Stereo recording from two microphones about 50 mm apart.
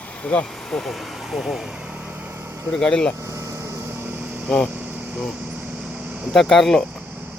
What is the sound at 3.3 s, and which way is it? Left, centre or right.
Vehicle, right.